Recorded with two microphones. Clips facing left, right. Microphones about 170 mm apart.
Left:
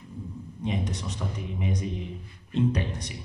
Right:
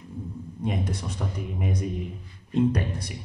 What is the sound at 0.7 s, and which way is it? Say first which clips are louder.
Speech: right 1 dB; 55° right (ahead or behind).